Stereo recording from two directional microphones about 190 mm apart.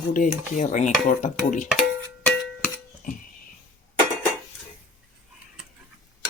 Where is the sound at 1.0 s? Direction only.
40° left (ahead or behind).